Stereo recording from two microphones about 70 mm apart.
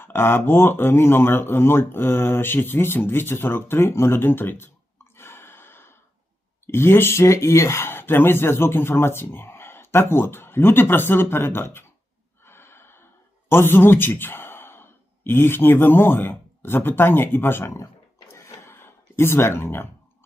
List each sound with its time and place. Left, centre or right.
0.0 s speech: left
5.1 s gasp: left
6.7 s speech: left
12.5 s gasp: left
13.5 s speech: left
18.3 s a sound: left